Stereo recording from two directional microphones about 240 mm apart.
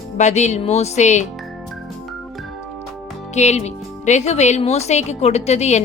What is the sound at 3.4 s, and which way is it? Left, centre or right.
Speech, left.